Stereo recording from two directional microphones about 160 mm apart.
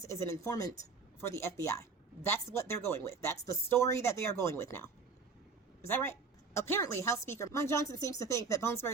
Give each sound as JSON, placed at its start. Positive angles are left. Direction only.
{"t": 0.0, "sound": "a woman's voice", "side_deg": 15}